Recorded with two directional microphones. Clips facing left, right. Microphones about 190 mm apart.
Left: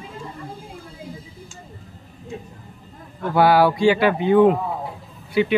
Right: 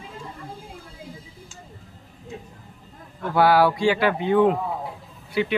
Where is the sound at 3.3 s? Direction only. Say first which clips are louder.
Left 2 dB; 20° left (ahead or behind).